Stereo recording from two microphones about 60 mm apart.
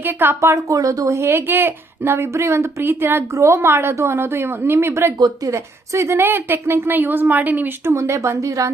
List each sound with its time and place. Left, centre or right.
0.0 s a woman's voice: right
0.4 s a woman's voice: right
3.3 s a woman's voice: right
6.2 s a woman's voice: right
7.9 s a woman's voice: right